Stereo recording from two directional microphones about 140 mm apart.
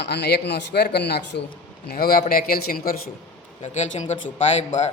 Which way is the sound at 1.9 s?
90° left.